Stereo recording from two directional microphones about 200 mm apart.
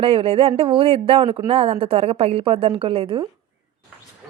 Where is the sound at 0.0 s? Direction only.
25° right (ahead or behind).